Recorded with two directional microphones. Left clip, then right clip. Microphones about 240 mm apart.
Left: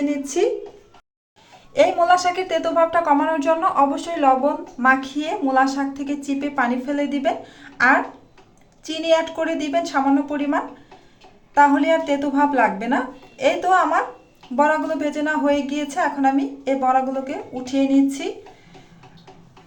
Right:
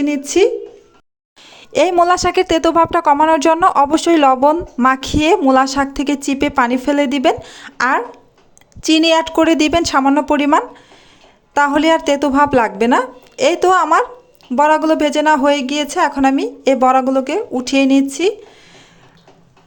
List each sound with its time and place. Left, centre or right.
0.0 s speech: right
1.7 s speech: right